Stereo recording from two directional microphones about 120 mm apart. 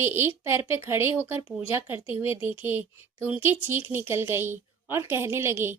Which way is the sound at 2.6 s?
15° right (ahead or behind).